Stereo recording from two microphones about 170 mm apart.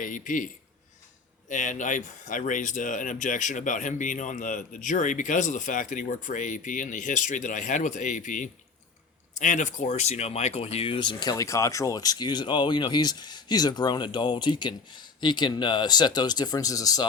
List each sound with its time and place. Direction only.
0.0 s speech: 50° left (ahead or behind); by 17.1 s 20° left (ahead or behind)